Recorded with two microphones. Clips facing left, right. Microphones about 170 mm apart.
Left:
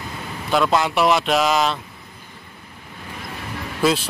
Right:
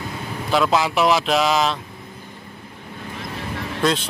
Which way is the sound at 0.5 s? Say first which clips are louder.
Even; centre (ahead or behind).